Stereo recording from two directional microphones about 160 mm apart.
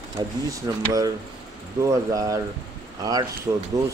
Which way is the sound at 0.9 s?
20° right (ahead or behind).